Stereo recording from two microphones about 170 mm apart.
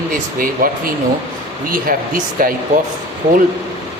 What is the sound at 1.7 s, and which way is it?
Speech, 55° right (ahead or behind).